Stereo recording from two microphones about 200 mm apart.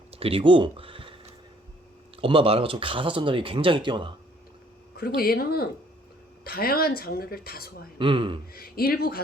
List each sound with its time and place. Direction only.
0.1 s speech: 30° right (ahead or behind)
2.2 s speech: 25° right (ahead or behind)
4.9 s speech: 50° left (ahead or behind)
7.9 s speech: 25° right (ahead or behind)
8.5 s speech: 50° left (ahead or behind)